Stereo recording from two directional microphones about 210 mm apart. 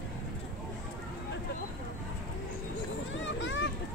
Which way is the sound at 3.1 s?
60° left (ahead or behind).